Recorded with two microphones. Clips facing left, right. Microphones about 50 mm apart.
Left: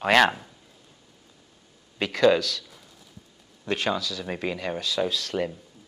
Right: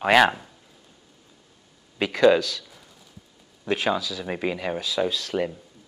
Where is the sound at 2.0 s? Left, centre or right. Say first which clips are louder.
Right 2 dB; centre.